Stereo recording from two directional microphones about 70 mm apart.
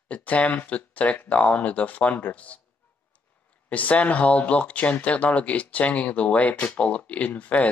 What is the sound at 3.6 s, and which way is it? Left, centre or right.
Speech, left.